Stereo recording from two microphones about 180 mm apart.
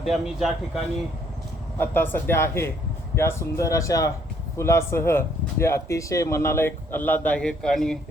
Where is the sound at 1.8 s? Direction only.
10° left (ahead or behind).